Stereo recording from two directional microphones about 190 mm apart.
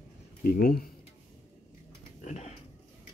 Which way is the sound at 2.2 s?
40° left (ahead or behind).